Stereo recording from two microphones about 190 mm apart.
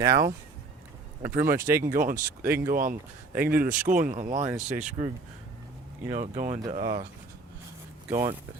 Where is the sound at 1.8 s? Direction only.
45° right (ahead or behind).